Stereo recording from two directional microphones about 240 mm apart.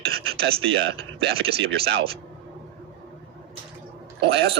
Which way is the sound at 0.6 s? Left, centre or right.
Right.